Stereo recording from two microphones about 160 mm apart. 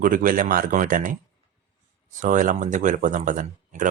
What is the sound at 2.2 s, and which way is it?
Speech, 55° right (ahead or behind).